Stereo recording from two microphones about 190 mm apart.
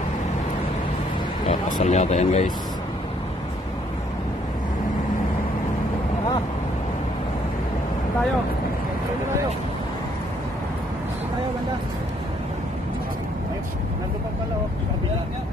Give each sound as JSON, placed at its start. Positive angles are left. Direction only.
{"t": 1.5, "sound": "speech", "side_deg": 40}